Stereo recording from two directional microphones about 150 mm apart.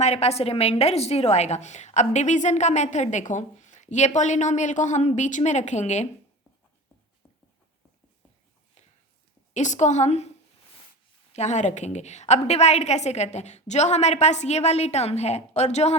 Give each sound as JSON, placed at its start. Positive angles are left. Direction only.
{"t": 0.0, "sound": "a woman's voice", "side_deg": 45}
{"t": 9.6, "sound": "a woman's voice", "side_deg": 50}
{"t": 11.3, "sound": "a woman's voice", "side_deg": 50}